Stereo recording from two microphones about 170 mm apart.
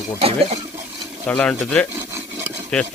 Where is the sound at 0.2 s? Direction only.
35° right (ahead or behind).